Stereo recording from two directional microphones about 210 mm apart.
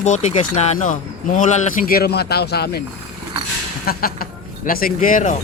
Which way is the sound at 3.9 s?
45° left (ahead or behind).